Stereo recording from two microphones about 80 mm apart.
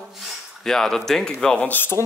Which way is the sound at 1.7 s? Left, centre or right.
Left.